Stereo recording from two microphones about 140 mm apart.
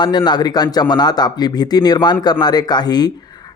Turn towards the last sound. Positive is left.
turn(degrees=30)  # may be behind; listen again after turning